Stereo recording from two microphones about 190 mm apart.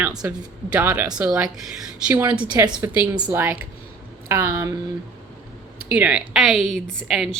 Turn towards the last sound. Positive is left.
turn(degrees=0)  # may be behind; listen again after turning